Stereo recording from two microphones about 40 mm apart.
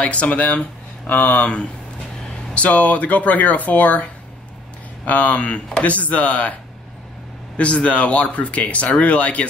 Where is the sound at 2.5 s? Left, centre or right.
Left.